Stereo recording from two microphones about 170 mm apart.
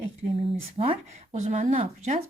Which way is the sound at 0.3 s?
30° right (ahead or behind).